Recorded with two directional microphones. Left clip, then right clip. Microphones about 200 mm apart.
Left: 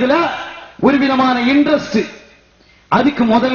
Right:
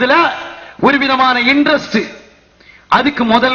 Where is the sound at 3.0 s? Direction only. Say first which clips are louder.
Left 1 dB; 25° right (ahead or behind).